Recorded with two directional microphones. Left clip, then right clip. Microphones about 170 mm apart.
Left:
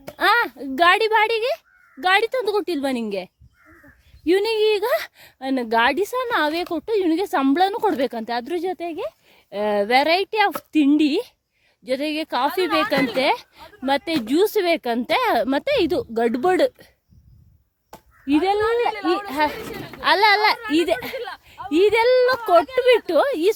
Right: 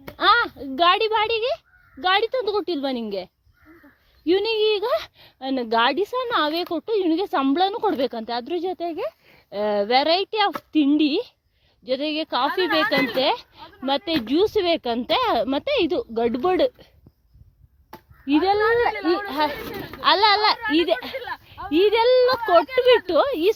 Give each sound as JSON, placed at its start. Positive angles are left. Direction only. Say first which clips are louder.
{"t": 0.2, "sound": "speech", "louder": "even", "side_deg": 35}
{"t": 4.3, "sound": "a woman's voice", "louder": "left 2 dB", "side_deg": 35}
{"t": 18.3, "sound": "speech", "louder": "even", "side_deg": 25}